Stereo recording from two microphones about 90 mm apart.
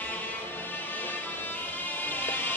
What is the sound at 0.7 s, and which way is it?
Music, 20° left (ahead or behind).